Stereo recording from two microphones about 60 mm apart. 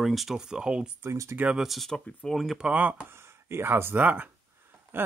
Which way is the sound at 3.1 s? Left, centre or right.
Right.